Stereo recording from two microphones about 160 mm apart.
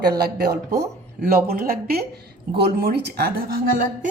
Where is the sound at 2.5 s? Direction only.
85° right; by 4.1 s 65° right (ahead or behind).